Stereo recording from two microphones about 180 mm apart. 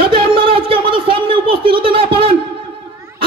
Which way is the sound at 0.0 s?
30° right (ahead or behind).